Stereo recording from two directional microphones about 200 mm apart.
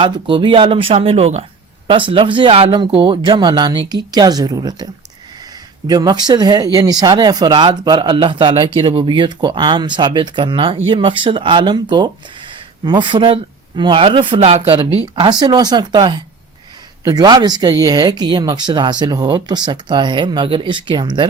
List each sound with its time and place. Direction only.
0.0 s speech: 25° right (ahead or behind)
5.9 s speech: 20° right (ahead or behind)